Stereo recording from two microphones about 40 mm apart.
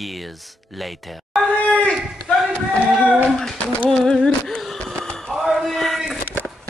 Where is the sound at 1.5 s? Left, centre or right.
Left.